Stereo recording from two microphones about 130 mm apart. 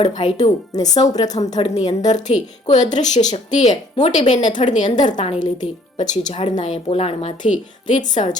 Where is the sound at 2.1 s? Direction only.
60° left (ahead or behind).